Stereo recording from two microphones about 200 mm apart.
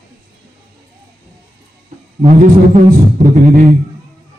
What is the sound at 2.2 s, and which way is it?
Speech, 35° right (ahead or behind).